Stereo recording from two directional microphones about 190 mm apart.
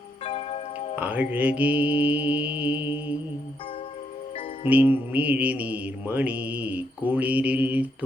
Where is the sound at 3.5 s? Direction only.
30° left (ahead or behind).